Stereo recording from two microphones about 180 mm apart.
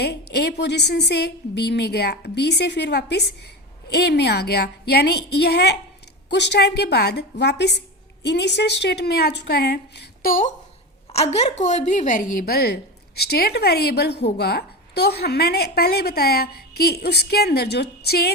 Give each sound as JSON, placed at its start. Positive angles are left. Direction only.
{"t": 0.0, "sound": "a woman's voice", "side_deg": 65}
{"t": 11.1, "sound": "a woman's voice", "side_deg": 35}